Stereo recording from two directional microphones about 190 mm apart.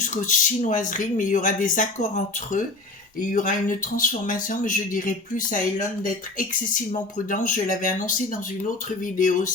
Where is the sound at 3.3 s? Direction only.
45° left (ahead or behind).